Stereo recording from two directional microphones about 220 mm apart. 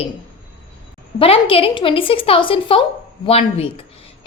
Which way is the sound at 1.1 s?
25° left (ahead or behind).